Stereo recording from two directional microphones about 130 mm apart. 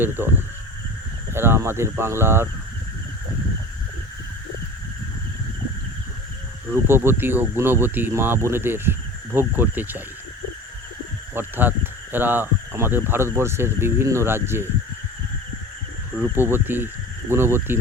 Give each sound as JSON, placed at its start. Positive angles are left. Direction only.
{"t": 0.0, "sound": "speech", "side_deg": -15}
{"t": 6.7, "sound": "speech", "side_deg": -20}
{"t": 11.3, "sound": "speech", "side_deg": -15}
{"t": 16.3, "sound": "speech", "side_deg": -15}